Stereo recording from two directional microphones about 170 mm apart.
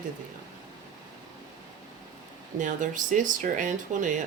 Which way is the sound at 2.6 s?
50° right (ahead or behind).